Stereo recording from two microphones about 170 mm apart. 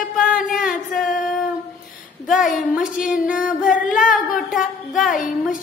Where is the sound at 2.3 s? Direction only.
Centre (ahead or behind).